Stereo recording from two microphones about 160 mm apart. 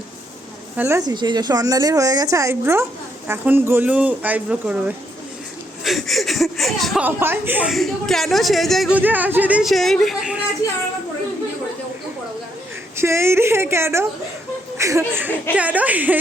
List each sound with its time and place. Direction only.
0.8 s a woman's voice: 15° right (ahead or behind); by 7.0 s centre (ahead or behind)
7.0 s speech: 15° right (ahead or behind)
7.7 s speech: centre (ahead or behind)
9.0 s speech: 10° right (ahead or behind)
13.0 s speech: 15° right (ahead or behind)